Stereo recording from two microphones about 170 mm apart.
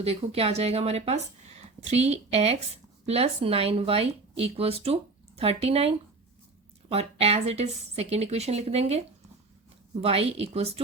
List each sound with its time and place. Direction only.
0.0 s speech: 35° right (ahead or behind)
6.9 s speech: 35° right (ahead or behind)